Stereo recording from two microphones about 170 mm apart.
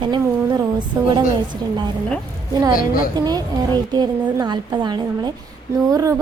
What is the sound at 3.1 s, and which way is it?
Speech, 25° right (ahead or behind).